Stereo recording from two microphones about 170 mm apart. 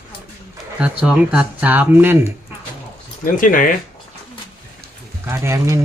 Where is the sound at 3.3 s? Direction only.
50° left (ahead or behind).